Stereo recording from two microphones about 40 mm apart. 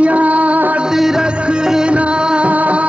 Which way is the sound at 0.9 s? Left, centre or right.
Centre.